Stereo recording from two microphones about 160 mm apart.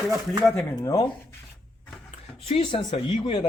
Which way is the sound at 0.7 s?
25° left (ahead or behind).